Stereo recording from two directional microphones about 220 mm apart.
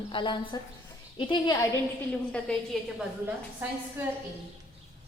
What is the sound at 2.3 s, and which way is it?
A woman's voice, 5° left (ahead or behind).